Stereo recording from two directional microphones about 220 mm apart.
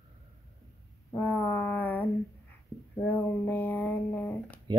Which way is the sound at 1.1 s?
10° left (ahead or behind).